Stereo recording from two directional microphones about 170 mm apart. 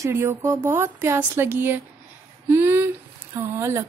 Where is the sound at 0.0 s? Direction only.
15° right (ahead or behind).